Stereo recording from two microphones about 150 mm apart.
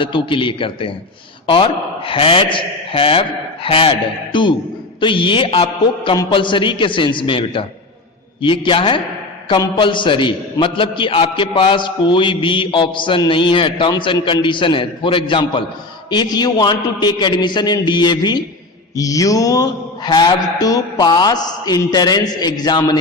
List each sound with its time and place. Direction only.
0.0 s a man's voice: 35° left (ahead or behind)